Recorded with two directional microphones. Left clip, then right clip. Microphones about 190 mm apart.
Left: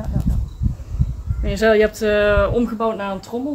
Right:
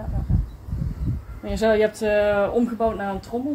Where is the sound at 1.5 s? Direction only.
40° left (ahead or behind).